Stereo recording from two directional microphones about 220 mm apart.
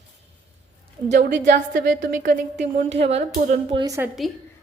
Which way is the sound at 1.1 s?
50° right (ahead or behind).